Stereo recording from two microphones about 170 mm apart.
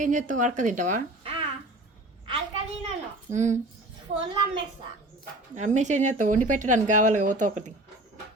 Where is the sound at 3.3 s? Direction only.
45° right (ahead or behind).